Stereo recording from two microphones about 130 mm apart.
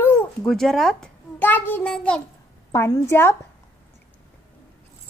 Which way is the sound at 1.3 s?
15° left (ahead or behind).